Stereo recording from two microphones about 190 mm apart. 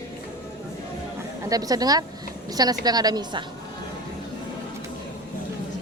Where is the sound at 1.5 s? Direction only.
20° right (ahead or behind).